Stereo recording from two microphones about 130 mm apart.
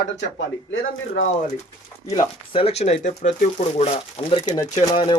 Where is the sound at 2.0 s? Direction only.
30° left (ahead or behind).